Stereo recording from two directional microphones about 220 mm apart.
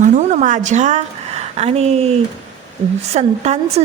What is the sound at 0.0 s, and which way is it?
A woman's voice, 35° right (ahead or behind).